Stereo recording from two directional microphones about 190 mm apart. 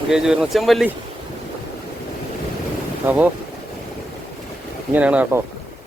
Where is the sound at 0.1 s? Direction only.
5° right (ahead or behind).